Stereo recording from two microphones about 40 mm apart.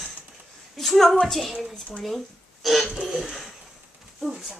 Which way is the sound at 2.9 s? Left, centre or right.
Centre.